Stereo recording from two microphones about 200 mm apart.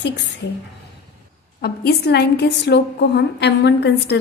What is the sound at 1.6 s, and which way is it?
A woman's voice, 50° left (ahead or behind).